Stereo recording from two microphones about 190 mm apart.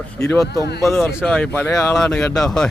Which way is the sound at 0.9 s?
15° left (ahead or behind).